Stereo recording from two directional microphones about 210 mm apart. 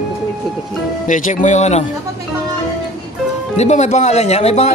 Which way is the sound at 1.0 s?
35° left (ahead or behind).